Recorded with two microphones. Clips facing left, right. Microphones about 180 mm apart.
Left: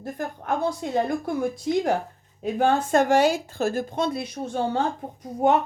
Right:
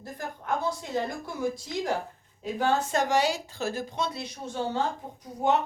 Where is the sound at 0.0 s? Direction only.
55° left (ahead or behind).